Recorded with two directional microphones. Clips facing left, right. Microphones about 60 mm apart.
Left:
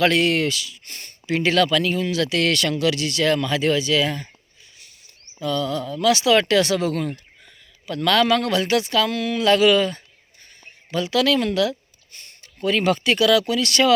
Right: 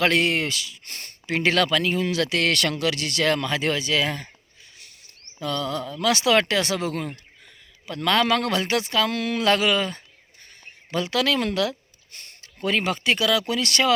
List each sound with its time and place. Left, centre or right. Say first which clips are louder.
0.0 s speech: left 3 dB; right
0.9 s speech: left 5 dB; right
5.4 s speech: left 3 dB; right
9.1 s a sound: left 3 dB; right
9.6 s speech: left 6 dB; right
10.9 s speech: left 3 dB; right
12.1 s a sound: even; right
12.8 s speech: left 8 dB; right